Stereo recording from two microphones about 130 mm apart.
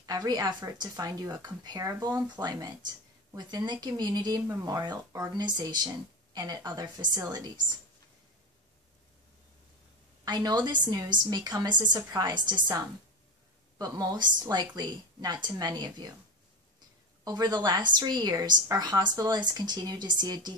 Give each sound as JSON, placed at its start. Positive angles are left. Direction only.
{"t": 0.0, "sound": "a woman's voice", "side_deg": -30}
{"t": 10.2, "sound": "a woman's voice", "side_deg": -35}
{"t": 13.7, "sound": "a woman's voice", "side_deg": -30}
{"t": 17.2, "sound": "a woman's voice", "side_deg": -30}